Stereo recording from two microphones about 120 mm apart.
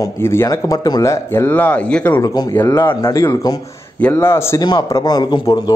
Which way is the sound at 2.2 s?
35° left (ahead or behind).